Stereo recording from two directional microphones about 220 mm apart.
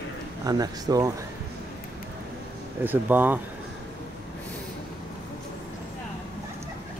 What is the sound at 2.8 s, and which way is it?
Speech, 10° right (ahead or behind).